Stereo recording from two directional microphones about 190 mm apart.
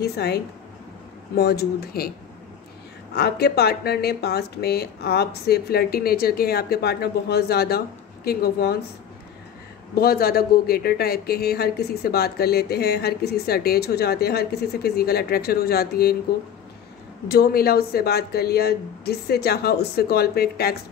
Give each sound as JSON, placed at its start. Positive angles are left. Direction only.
{"t": 0.0, "sound": "speech", "side_deg": 60}
{"t": 3.2, "sound": "speech", "side_deg": 55}
{"t": 9.9, "sound": "speech", "side_deg": 50}
{"t": 17.3, "sound": "speech", "side_deg": 55}